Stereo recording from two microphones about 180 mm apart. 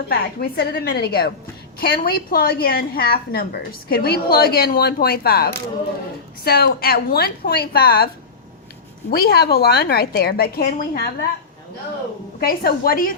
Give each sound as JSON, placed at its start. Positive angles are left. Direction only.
{"t": 0.1, "sound": "a woman's voice", "side_deg": 60}
{"t": 12.4, "sound": "a woman's voice", "side_deg": 55}